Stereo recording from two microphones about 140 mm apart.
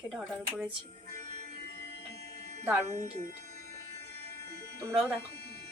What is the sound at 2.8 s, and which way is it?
Speech, 55° right (ahead or behind).